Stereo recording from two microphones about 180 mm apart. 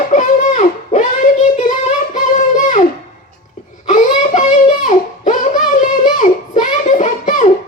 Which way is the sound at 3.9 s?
45° left (ahead or behind).